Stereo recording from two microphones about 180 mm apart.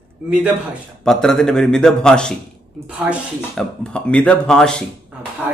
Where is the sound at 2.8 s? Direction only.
5° right (ahead or behind).